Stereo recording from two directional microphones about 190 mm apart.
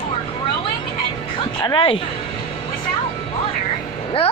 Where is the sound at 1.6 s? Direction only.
25° left (ahead or behind).